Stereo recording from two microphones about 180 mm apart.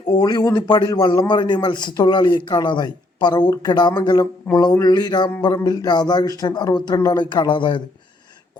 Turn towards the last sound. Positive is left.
turn(degrees=25)  # may be behind; listen again after turning